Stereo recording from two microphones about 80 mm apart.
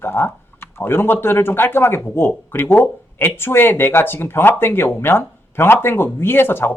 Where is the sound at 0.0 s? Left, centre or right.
Left.